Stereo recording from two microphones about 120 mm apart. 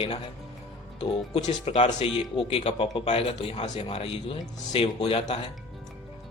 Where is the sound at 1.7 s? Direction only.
55° left (ahead or behind).